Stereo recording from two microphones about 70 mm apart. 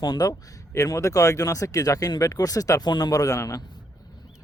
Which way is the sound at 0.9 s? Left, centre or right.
Left.